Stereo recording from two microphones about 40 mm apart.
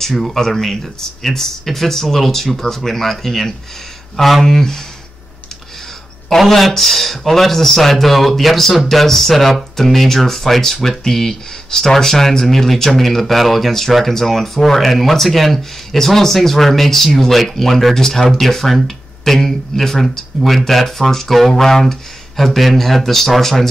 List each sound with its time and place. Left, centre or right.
0.1 s speech: centre
6.2 s speech: centre